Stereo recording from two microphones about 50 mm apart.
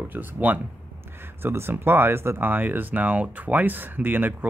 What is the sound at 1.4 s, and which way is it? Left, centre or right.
Speech, right.